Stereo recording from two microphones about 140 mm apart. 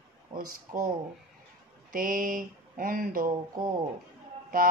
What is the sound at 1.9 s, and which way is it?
Speech, 85° right.